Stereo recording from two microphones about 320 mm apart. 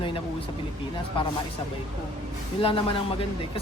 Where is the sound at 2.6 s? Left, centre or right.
Centre.